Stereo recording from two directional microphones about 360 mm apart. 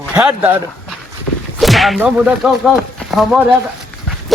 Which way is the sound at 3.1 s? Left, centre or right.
Centre.